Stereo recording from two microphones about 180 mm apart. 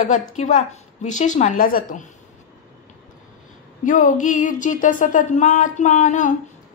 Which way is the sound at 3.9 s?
45° left (ahead or behind).